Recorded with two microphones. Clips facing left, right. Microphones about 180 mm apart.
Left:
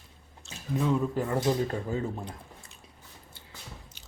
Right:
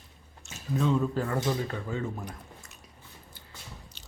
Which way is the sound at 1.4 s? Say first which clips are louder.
Left 3 dB; 35° left (ahead or behind).